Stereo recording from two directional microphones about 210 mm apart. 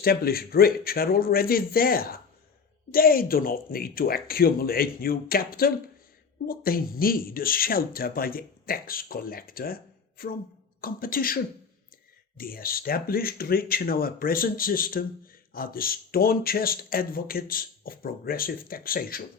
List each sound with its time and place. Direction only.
0.0 s speech: 45° left (ahead or behind)
12.4 s speech: 45° left (ahead or behind)